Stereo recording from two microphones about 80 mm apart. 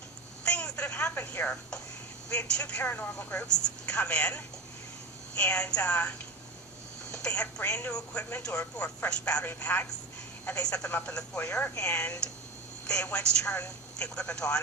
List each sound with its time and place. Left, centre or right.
0.4 s speech: centre